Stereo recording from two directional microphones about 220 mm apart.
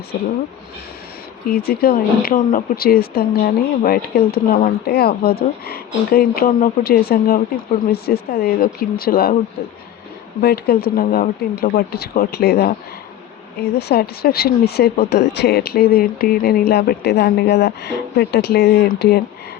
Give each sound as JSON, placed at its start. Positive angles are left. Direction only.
{"t": 1.5, "sound": "speech", "side_deg": 45}
{"t": 10.4, "sound": "speech", "side_deg": 45}